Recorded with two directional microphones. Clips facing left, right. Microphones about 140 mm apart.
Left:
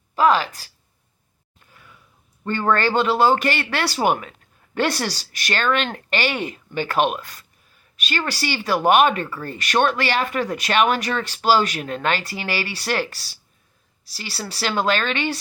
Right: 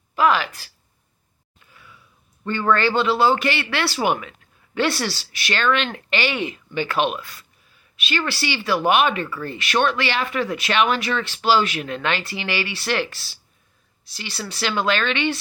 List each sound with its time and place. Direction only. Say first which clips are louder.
0.2 s speech: left 1 dB; 35° left (ahead or behind)
2.4 s speech: even; 45° left (ahead or behind)